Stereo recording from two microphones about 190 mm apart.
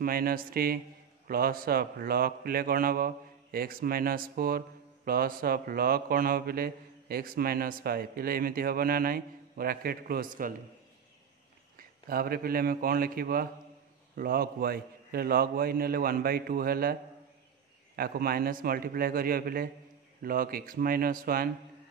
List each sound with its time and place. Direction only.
0.0 s a man's voice: 50° right (ahead or behind)
12.1 s a man's voice: 50° right (ahead or behind)
17.9 s a man's voice: 50° right (ahead or behind)